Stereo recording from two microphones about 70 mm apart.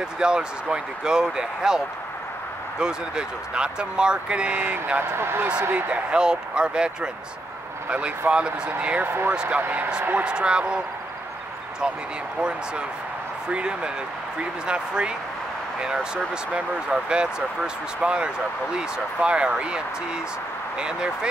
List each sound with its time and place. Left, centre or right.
0.2 s speech: centre
2.8 s speech: centre
5.1 s speech: right
5.4 s speech: centre
6.0 s speech: centre
8.3 s speech: centre
12.4 s speech: centre